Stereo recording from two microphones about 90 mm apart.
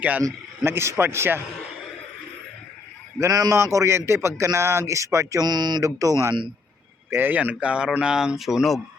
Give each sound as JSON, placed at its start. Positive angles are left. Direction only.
{"t": 0.2, "sound": "speech", "side_deg": -30}
{"t": 3.2, "sound": "speech", "side_deg": -40}
{"t": 5.5, "sound": "speech", "side_deg": -50}
{"t": 5.8, "sound": "speech", "side_deg": -40}
{"t": 7.1, "sound": "speech", "side_deg": -20}